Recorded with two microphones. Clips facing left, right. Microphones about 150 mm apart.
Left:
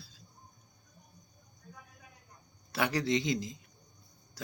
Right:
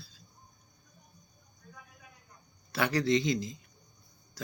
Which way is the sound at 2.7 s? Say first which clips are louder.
Right 3 dB; 15° left (ahead or behind).